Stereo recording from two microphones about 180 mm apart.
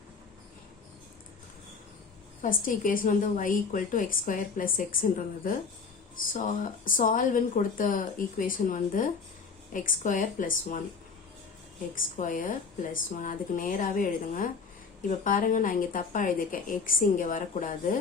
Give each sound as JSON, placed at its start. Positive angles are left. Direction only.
{"t": 2.4, "sound": "a woman's voice", "side_deg": 50}
{"t": 11.9, "sound": "a woman's voice", "side_deg": 45}